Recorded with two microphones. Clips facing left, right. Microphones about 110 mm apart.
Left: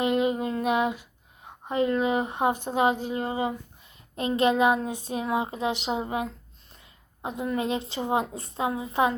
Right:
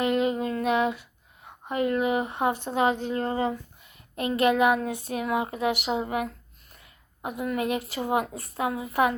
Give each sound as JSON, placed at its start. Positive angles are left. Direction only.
{"t": 0.0, "sound": "a sound", "side_deg": 20}
{"t": 1.6, "sound": "speech", "side_deg": 25}
{"t": 4.1, "sound": "a woman's voice", "side_deg": 25}